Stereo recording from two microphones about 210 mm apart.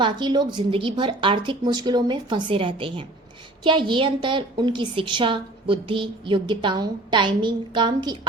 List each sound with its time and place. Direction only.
0.0 s a woman's voice: 20° right (ahead or behind)